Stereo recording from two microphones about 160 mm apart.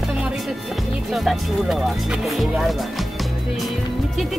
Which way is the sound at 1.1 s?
Centre (ahead or behind).